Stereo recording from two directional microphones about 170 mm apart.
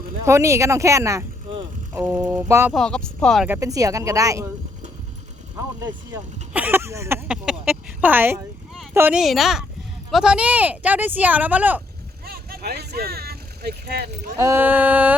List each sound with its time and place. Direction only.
0.3 s speech: 15° right (ahead or behind)
2.7 s speech: 5° left (ahead or behind)
3.4 s speech: 15° right (ahead or behind)
6.5 s speech: 10° right (ahead or behind)
9.2 s speech: centre (ahead or behind)
12.2 s vehicle: 65° right (ahead or behind)
14.3 s speech: 15° right (ahead or behind)